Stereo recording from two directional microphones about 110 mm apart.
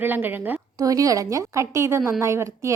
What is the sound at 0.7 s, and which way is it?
A woman's voice, 30° right (ahead or behind).